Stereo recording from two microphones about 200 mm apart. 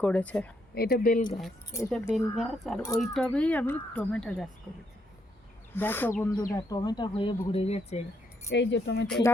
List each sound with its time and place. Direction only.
0.0 s speech: 5° left (ahead or behind)
0.7 s speech: 50° left (ahead or behind)
1.9 s speech: centre (ahead or behind)
5.7 s speech: 10° left (ahead or behind); by 8.0 s 30° left (ahead or behind)
8.4 s speech: 60° left (ahead or behind)